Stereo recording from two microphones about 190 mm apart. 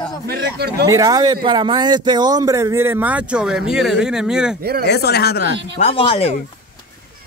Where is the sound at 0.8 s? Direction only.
20° right (ahead or behind); by 4.5 s 5° right (ahead or behind).